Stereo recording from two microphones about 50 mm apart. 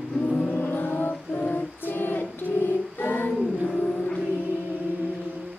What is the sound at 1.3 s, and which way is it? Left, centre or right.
Music, left.